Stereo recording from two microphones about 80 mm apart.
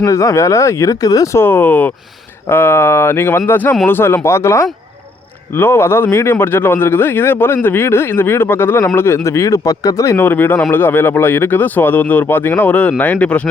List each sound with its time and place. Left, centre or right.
0.0 s speech: left
1.4 s speech: left
10.2 s speech: left